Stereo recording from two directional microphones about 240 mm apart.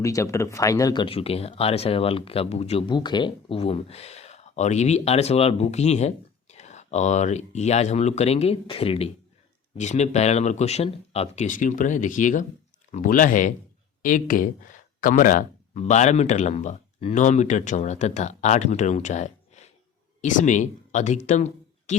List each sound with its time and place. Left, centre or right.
0.0 s speech: centre; by 21.9 s left